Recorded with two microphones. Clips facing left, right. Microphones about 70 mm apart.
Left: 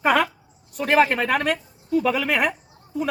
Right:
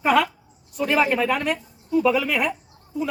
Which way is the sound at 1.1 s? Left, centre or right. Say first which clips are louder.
Even; left.